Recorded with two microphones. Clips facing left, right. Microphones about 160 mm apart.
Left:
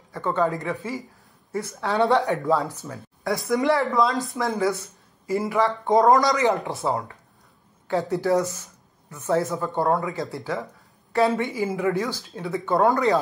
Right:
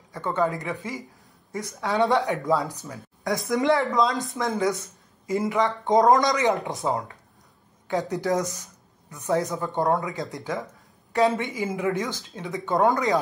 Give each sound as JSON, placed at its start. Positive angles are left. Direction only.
{"t": 0.1, "sound": "a woman's voice", "side_deg": -20}